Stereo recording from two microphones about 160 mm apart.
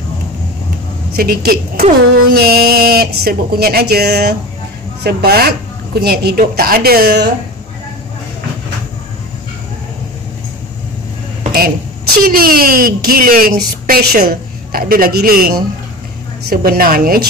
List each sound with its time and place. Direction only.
1.1 s a woman's voice: 70° right (ahead or behind); by 4.4 s 90° right
5.0 s a woman's voice: 75° right (ahead or behind)
11.5 s a woman's voice: 70° right (ahead or behind)